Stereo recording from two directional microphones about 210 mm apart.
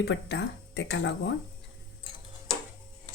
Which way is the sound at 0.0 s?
55° left (ahead or behind).